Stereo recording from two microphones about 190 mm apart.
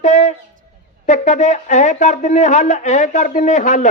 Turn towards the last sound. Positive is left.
turn(degrees=40)  # may be behind; listen again after turning